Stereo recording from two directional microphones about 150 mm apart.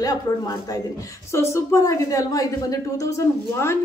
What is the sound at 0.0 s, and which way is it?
A woman's voice, 25° left (ahead or behind).